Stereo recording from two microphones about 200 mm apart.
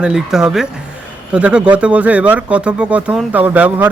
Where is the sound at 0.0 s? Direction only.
5° right (ahead or behind).